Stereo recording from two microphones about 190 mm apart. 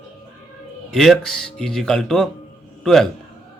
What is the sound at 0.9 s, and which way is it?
A man's voice, centre (ahead or behind).